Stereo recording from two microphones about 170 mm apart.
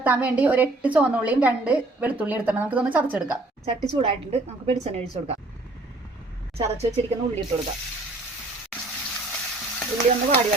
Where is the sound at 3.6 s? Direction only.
35° right (ahead or behind).